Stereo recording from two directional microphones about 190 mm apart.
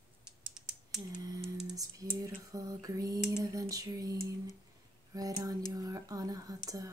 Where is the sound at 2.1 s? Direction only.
15° right (ahead or behind).